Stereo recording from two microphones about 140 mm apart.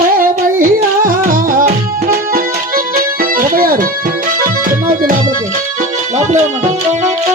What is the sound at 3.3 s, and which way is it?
Music, 90° right.